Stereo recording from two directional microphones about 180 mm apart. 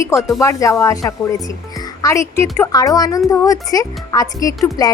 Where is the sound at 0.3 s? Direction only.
15° left (ahead or behind).